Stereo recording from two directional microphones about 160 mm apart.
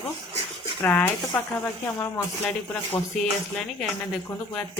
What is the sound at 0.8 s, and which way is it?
Speech, 10° left (ahead or behind).